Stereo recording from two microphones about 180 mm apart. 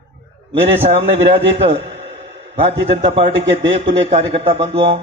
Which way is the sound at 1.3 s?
30° right (ahead or behind).